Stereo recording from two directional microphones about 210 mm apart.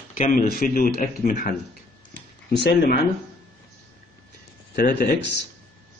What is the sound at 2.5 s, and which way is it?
Speech, 50° left (ahead or behind).